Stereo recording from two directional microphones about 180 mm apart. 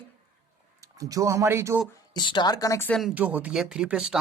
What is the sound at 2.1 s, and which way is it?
Speech, 25° left (ahead or behind).